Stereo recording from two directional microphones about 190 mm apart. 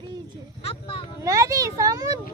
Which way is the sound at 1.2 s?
20° right (ahead or behind).